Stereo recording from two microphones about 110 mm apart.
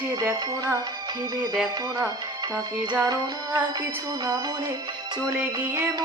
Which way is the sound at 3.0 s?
40° right (ahead or behind).